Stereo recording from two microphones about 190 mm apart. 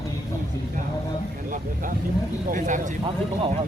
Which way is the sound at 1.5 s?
45° right (ahead or behind).